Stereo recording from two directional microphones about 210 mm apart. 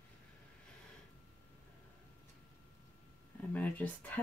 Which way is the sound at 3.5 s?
10° left (ahead or behind).